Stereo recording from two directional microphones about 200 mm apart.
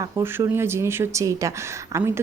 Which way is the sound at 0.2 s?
10° right (ahead or behind).